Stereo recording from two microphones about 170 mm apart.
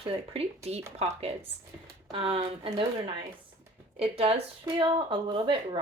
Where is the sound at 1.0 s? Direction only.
35° right (ahead or behind).